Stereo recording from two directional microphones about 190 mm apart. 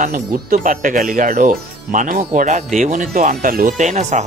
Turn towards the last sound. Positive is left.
turn(degrees=-35)  # may be behind; listen again after turning